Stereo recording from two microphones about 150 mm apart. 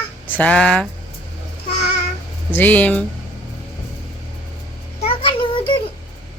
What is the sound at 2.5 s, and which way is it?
Speech, 10° left (ahead or behind).